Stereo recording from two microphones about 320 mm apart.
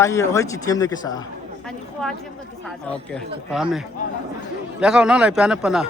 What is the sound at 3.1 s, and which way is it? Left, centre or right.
Speech, centre.